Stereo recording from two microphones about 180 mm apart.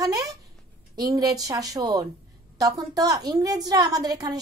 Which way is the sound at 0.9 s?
20° right (ahead or behind).